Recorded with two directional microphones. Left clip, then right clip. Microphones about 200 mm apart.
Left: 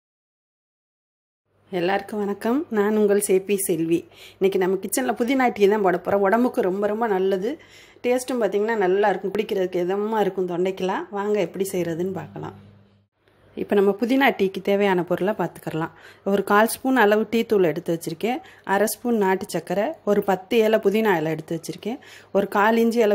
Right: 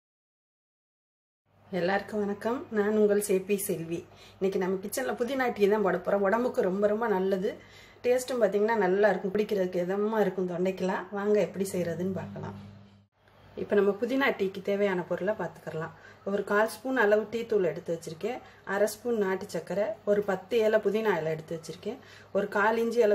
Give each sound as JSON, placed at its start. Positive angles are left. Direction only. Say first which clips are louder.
{"t": 1.7, "sound": "speech", "louder": "left 5 dB", "side_deg": 40}
{"t": 13.7, "sound": "speech", "louder": "left 6 dB", "side_deg": 35}